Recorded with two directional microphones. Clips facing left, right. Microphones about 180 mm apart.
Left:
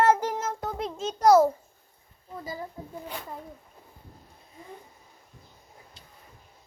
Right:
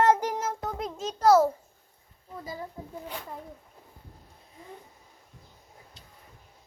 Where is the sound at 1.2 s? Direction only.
15° left (ahead or behind).